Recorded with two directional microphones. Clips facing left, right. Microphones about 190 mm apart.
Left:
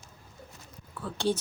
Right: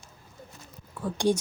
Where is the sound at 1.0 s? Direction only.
15° right (ahead or behind).